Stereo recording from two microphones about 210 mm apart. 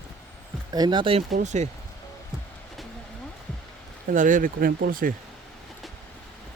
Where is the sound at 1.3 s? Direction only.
35° right (ahead or behind).